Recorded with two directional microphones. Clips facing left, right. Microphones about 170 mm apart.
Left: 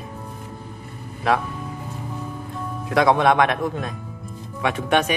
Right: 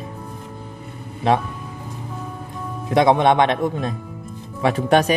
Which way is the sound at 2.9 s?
20° right (ahead or behind).